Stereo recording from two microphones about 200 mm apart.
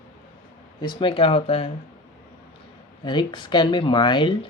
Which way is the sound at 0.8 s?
25° left (ahead or behind).